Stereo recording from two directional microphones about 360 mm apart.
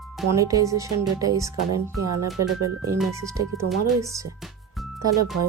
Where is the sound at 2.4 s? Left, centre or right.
Right.